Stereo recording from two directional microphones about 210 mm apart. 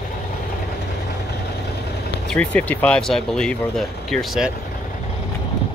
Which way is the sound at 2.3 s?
5° left (ahead or behind).